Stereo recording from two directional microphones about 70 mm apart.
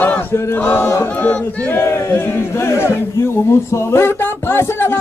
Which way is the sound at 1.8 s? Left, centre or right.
Left.